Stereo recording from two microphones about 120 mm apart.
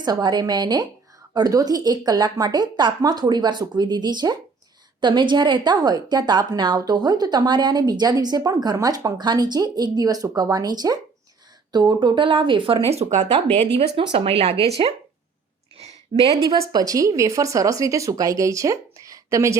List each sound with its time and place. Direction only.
0.0 s a woman's voice: 35° right (ahead or behind); by 13.2 s 70° right (ahead or behind)
13.7 s speech: 50° right (ahead or behind)
15.8 s a sound: 55° right (ahead or behind)
16.7 s speech: 30° right (ahead or behind)